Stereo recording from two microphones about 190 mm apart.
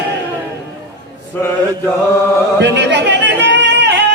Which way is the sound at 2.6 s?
65° right (ahead or behind).